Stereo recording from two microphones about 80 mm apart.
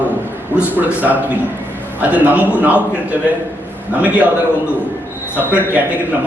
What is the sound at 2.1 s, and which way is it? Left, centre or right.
Speech, right.